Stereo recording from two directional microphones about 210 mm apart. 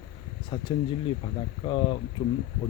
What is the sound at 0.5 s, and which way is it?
Speech, 25° left (ahead or behind).